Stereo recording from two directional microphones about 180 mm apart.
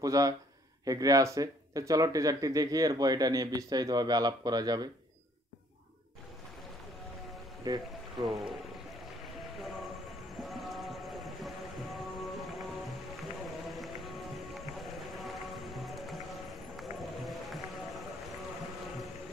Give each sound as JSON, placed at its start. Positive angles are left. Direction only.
{"t": 0.0, "sound": "speech", "side_deg": -20}
{"t": 7.7, "sound": "speech", "side_deg": -20}
{"t": 8.2, "sound": "speech", "side_deg": 0}
{"t": 10.4, "sound": "music", "side_deg": 0}
{"t": 17.0, "sound": "run", "side_deg": 0}